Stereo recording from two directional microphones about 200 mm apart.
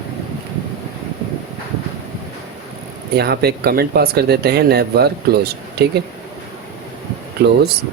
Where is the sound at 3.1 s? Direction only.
55° right (ahead or behind).